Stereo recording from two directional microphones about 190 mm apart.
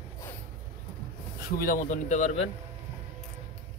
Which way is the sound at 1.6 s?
45° left (ahead or behind).